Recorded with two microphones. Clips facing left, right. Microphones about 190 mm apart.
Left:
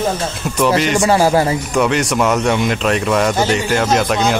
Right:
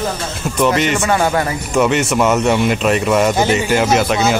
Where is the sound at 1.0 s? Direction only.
30° left (ahead or behind).